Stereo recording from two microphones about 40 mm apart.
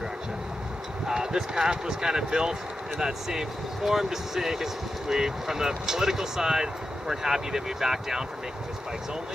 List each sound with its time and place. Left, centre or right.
1.0 s speech: centre